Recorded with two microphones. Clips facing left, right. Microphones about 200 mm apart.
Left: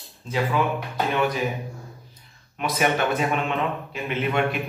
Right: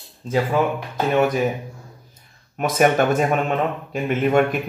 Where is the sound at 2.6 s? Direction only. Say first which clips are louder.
Right 6 dB; 45° right (ahead or behind).